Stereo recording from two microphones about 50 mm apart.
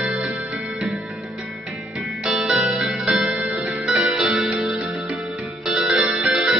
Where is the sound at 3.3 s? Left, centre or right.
Centre.